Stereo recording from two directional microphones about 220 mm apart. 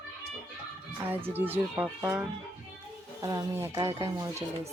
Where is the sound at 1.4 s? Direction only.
10° right (ahead or behind).